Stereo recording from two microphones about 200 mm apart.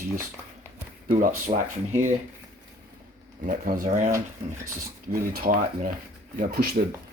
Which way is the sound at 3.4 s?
40° right (ahead or behind).